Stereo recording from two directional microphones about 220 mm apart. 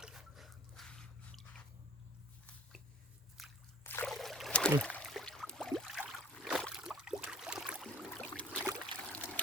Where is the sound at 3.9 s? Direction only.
5° left (ahead or behind).